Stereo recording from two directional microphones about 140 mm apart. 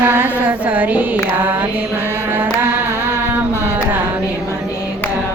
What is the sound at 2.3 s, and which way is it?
Carnatic music, 15° right (ahead or behind).